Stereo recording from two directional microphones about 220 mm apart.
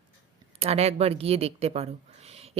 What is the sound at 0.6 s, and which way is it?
Speech, 30° right (ahead or behind).